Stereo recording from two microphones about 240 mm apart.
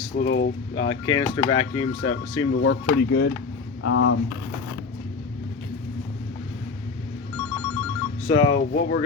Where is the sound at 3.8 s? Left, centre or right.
Left.